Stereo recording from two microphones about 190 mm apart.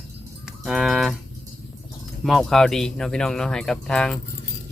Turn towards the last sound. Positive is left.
turn(degrees=5)  # may be behind; listen again after turning